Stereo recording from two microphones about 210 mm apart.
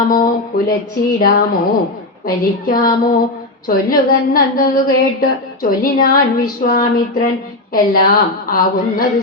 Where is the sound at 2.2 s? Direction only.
45° left (ahead or behind).